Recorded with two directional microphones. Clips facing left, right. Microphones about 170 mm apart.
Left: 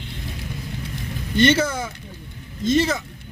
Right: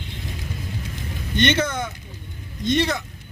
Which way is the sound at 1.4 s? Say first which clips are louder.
Left 3 dB; 10° left (ahead or behind).